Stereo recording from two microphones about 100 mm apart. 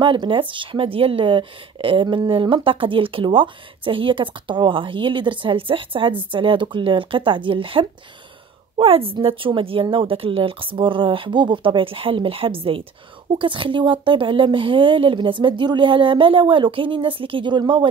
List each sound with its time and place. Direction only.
0.0 s a woman's voice: 55° right (ahead or behind)